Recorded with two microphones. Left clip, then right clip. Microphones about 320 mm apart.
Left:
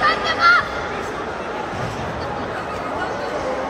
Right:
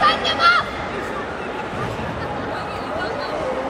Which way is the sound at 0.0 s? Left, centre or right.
Right.